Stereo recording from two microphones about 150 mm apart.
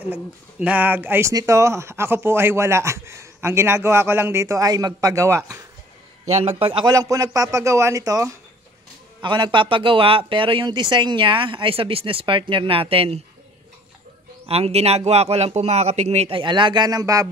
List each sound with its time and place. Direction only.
0.1 s speech: 10° right (ahead or behind)
6.6 s speech: 35° right (ahead or behind)
6.9 s a man's voice: 25° right (ahead or behind); by 13.2 s 40° right (ahead or behind)
14.4 s a man's voice: 40° right (ahead or behind); by 17.3 s 20° right (ahead or behind)